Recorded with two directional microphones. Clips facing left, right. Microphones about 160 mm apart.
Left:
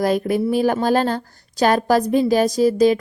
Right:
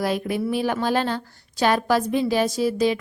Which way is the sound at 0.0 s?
45° left (ahead or behind).